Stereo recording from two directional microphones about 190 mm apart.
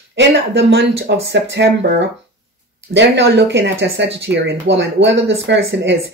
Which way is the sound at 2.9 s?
65° right (ahead or behind).